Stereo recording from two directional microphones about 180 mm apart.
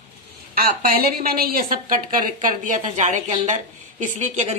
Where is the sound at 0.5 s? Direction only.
55° right (ahead or behind).